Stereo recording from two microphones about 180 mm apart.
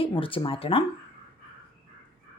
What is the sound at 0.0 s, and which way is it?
Speech, 30° left (ahead or behind).